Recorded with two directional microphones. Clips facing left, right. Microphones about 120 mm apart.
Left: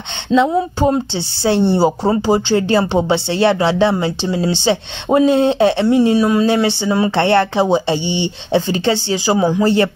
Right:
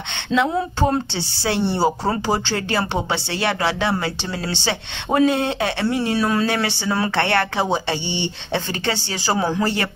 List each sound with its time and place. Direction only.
0.3 s speech: 5° left (ahead or behind)
0.7 s speech: 20° left (ahead or behind)